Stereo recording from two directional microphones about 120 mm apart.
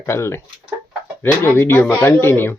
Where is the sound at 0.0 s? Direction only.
20° left (ahead or behind).